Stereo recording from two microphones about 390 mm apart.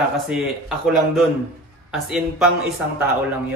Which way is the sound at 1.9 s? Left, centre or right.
Centre.